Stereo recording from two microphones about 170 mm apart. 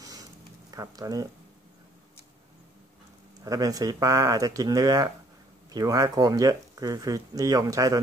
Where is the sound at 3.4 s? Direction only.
20° right (ahead or behind).